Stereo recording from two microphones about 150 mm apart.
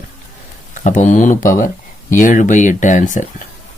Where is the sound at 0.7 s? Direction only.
55° left (ahead or behind).